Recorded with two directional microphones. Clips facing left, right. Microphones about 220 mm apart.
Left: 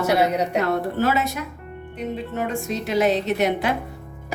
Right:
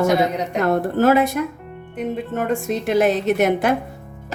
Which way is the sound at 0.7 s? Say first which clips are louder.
Right 5 dB; 50° right (ahead or behind).